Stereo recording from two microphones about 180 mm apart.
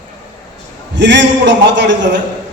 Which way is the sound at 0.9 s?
75° right (ahead or behind).